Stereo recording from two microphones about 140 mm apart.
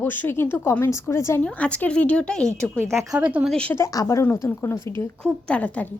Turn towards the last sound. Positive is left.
turn(degrees=10)  # may be behind; listen again after turning